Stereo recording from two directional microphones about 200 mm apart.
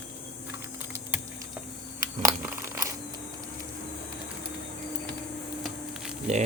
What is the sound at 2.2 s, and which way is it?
Crumpling, 10° right (ahead or behind).